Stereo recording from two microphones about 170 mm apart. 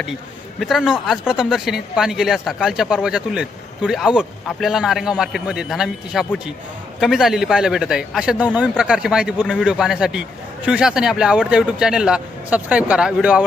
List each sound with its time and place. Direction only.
0.6 s speech: 5° right (ahead or behind)